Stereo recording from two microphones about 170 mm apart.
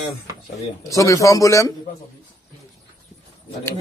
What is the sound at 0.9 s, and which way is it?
Speech, 20° left (ahead or behind).